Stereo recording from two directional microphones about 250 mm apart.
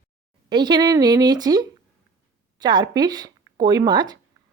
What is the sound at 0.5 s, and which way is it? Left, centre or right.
A woman's voice, centre.